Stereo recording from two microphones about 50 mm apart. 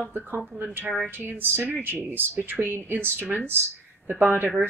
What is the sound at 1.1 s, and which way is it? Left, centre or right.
Speech, right.